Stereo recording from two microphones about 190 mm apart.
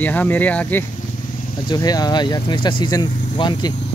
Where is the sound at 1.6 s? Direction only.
20° left (ahead or behind).